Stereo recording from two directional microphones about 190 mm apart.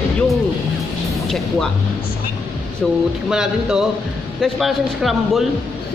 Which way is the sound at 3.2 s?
5° right (ahead or behind).